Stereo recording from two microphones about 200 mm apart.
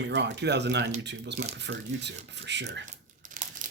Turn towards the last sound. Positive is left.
turn(degrees=-40)  # may be behind; listen again after turning